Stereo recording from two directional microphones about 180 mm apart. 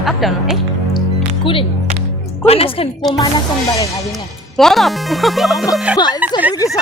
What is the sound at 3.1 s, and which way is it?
Music, 25° left (ahead or behind).